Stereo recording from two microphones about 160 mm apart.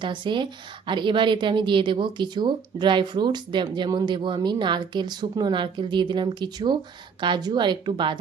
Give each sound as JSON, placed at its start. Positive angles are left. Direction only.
{"t": 0.0, "sound": "speech", "side_deg": -30}